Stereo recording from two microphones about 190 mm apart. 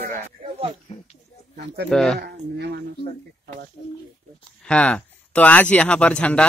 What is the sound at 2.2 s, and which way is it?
Speech, 60° right (ahead or behind).